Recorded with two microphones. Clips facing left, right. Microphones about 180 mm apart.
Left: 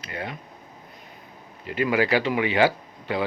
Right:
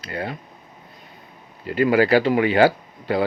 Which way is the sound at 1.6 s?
35° right (ahead or behind).